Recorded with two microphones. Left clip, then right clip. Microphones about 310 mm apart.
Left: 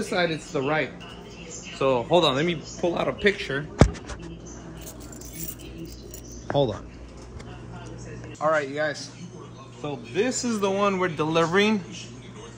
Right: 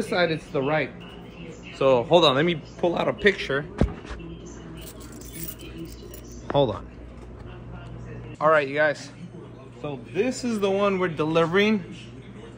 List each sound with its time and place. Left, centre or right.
0.1 s speech: centre
6.5 s speech: centre
8.4 s speech: right
9.8 s speech: centre